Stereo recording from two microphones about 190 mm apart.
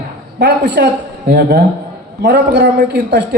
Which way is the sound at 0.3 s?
65° right (ahead or behind).